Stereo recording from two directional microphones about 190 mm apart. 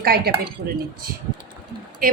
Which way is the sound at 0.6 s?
40° right (ahead or behind).